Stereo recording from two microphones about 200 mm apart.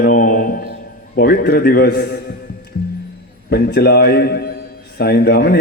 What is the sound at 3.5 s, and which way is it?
A man's voice, 50° left (ahead or behind).